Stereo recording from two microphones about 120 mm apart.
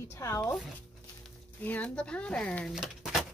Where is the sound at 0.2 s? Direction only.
25° left (ahead or behind).